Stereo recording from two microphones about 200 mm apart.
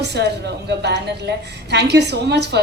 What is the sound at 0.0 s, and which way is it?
A woman's voice, 55° right (ahead or behind).